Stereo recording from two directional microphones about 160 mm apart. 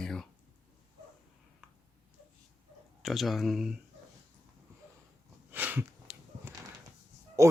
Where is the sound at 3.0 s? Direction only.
Centre (ahead or behind).